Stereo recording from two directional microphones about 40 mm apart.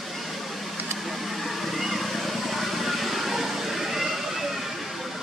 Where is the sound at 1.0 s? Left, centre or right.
Centre.